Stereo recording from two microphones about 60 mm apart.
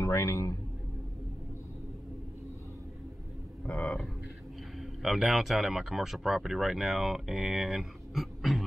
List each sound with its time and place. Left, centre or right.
0.0 s a man's voice: left
3.8 s speech: centre